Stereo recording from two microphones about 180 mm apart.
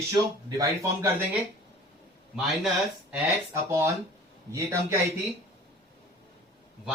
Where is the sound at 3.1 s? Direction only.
15° right (ahead or behind).